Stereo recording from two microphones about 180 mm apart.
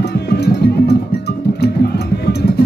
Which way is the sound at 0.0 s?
65° left (ahead or behind).